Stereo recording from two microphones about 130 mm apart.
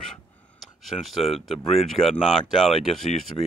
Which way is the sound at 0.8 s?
Centre (ahead or behind).